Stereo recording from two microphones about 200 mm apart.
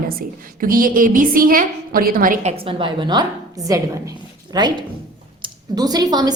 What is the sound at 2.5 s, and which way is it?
A woman's voice, 25° right (ahead or behind).